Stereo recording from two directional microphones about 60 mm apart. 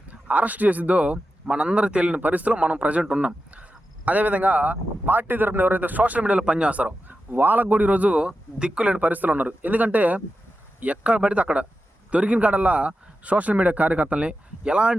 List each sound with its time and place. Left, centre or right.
0.1 s speech: right